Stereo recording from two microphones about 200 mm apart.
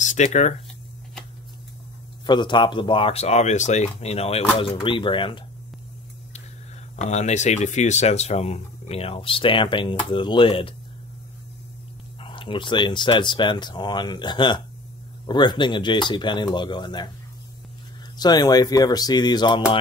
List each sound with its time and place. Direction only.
0.0 s speech: 35° left (ahead or behind)
2.2 s speech: 20° left (ahead or behind)
7.0 s speech: 35° left (ahead or behind)
12.2 s speech: 25° left (ahead or behind)
18.1 s speech: 20° left (ahead or behind)